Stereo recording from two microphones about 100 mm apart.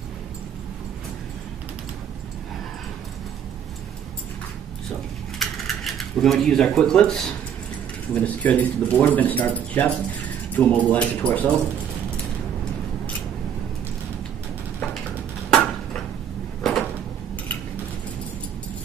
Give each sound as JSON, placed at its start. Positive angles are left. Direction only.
{"t": 5.4, "sound": "speech", "side_deg": 5}
{"t": 15.5, "sound": "a sound", "side_deg": 10}
{"t": 16.6, "sound": "door", "side_deg": 5}